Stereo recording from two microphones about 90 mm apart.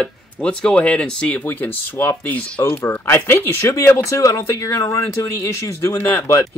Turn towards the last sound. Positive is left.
turn(degrees=30)  # may be behind; listen again after turning